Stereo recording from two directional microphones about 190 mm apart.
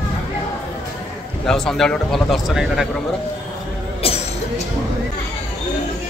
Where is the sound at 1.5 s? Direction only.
Centre (ahead or behind).